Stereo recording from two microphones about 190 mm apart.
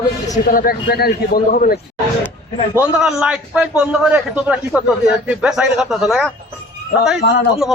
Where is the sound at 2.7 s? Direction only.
5° right (ahead or behind).